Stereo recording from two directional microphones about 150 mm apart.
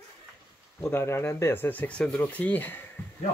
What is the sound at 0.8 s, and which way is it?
Speech, 15° left (ahead or behind).